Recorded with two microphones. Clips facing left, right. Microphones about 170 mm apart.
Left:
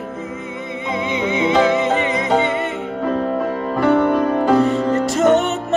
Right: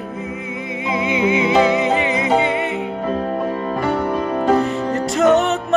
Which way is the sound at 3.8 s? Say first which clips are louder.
Left 7 dB; 60° left (ahead or behind).